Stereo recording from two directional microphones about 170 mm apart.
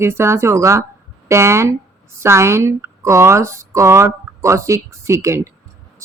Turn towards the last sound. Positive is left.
turn(degrees=-15)  # may be behind; listen again after turning